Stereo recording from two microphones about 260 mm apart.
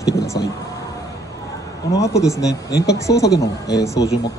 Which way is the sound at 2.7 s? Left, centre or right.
Left.